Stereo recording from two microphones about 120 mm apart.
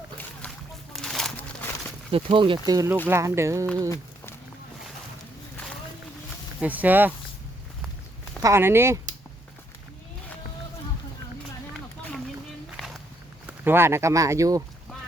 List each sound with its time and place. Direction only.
0.9 s a sound: 5° left (ahead or behind)
2.1 s speech: 45° right (ahead or behind)
2.6 s speech: 30° right (ahead or behind)
3.8 s a sound: 25° left (ahead or behind)
6.6 s speech: 15° right (ahead or behind)
8.4 s speech: 25° right (ahead or behind)
13.5 s speech: 20° right (ahead or behind)